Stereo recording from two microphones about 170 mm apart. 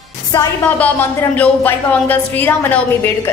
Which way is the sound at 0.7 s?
10° left (ahead or behind).